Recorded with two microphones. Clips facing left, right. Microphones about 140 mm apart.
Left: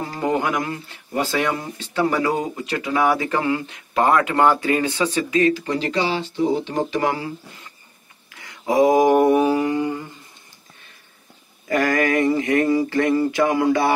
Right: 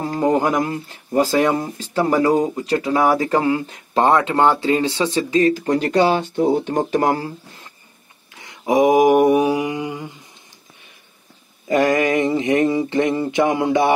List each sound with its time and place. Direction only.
0.0 s speech: 35° right (ahead or behind)
5.4 s speech: 45° right (ahead or behind)
8.4 s mantra: 20° right (ahead or behind)
11.6 s mantra: 20° right (ahead or behind)